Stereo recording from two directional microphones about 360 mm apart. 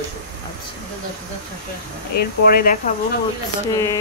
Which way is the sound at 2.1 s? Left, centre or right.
Left.